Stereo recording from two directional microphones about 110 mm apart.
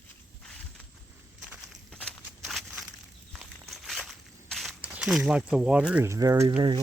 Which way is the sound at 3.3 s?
Centre (ahead or behind).